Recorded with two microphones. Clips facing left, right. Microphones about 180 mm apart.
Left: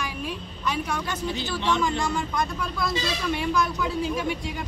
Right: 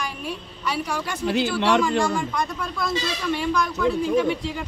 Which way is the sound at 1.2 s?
75° right (ahead or behind).